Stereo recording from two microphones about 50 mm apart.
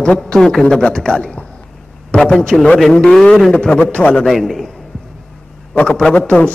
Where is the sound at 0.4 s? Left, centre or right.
Centre.